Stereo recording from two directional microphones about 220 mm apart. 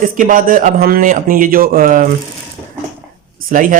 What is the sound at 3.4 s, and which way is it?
Speech, 40° right (ahead or behind).